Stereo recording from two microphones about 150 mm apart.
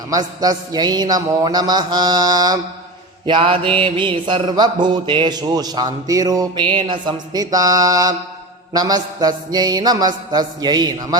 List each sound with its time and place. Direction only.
0.1 s speech: 25° right (ahead or behind)
3.2 s mantra: 35° right (ahead or behind)
6.7 s speech: 35° right (ahead or behind)